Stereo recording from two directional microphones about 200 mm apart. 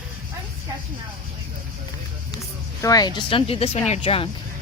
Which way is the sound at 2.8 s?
20° left (ahead or behind).